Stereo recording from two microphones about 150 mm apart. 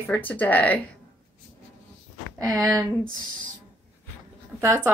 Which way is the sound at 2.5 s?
25° right (ahead or behind).